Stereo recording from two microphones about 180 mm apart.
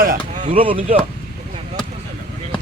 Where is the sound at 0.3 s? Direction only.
35° right (ahead or behind).